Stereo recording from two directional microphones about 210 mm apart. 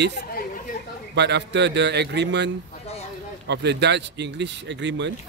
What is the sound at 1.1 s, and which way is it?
Speech, 55° right (ahead or behind).